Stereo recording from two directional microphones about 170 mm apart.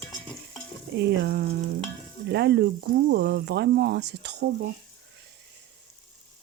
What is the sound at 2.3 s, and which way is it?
Speech, 80° right.